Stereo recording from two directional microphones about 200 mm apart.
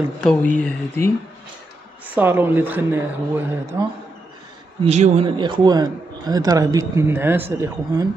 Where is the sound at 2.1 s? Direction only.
10° right (ahead or behind).